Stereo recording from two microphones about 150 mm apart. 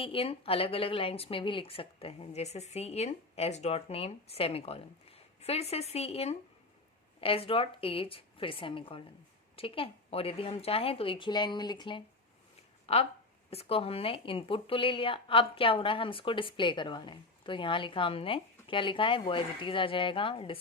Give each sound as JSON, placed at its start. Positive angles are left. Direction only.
{"t": 0.0, "sound": "speech", "side_deg": 40}
{"t": 12.8, "sound": "a sound", "side_deg": 40}
{"t": 13.5, "sound": "speech", "side_deg": 40}